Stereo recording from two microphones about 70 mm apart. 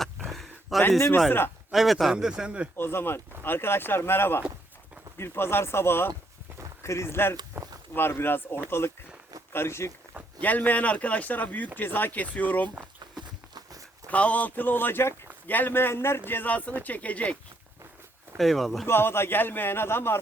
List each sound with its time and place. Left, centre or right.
0.3 s a sound: centre
1.7 s speech: centre
2.1 s speech: centre
2.7 s a man's voice: left
10.4 s speech: left
14.1 s speech: centre
18.3 s speech: centre
18.9 s a man's voice: left